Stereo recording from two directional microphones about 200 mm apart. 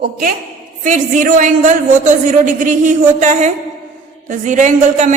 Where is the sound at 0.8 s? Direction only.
40° right (ahead or behind).